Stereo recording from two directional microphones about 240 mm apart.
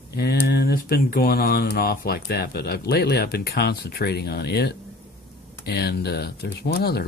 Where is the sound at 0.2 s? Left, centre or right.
Left.